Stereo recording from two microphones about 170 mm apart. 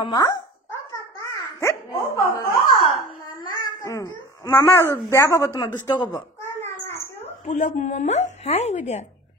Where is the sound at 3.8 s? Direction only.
20° left (ahead or behind).